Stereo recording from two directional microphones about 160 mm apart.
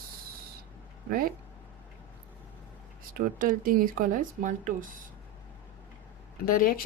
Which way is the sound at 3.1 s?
60° right (ahead or behind).